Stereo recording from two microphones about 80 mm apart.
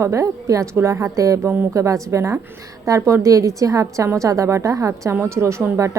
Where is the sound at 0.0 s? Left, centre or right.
Right.